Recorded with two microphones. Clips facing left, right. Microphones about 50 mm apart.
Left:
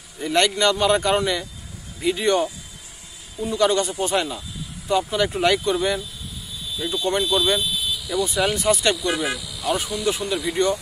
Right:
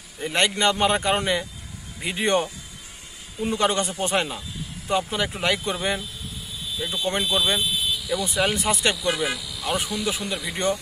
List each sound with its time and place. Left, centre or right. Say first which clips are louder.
0.2 s speech: left 3 dB; centre
5.3 s speech: left 5 dB; centre
6.7 s fire alarm: left 3 dB; centre
7.0 s speech: left 3 dB; centre
7.7 s a sound: left 1 dB; centre
8.6 s speech: left 3 dB; centre
8.9 s speech: left 1 dB; centre